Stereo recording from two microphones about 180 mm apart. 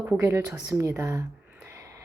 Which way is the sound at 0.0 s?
15° right (ahead or behind).